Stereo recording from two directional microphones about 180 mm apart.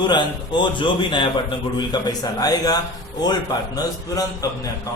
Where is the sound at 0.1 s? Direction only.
25° left (ahead or behind).